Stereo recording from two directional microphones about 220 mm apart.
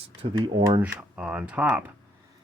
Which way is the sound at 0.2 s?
20° right (ahead or behind).